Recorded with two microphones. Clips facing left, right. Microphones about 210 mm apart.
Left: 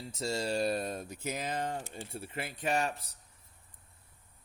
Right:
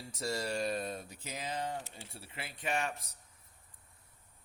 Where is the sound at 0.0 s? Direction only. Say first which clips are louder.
Left 3 dB; 25° left (ahead or behind); by 2.9 s 40° left (ahead or behind).